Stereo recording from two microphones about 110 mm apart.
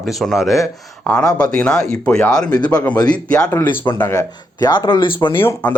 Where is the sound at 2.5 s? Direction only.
35° left (ahead or behind).